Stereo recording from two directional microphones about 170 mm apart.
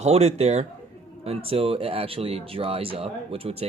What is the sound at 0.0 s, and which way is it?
Speech, 40° right (ahead or behind).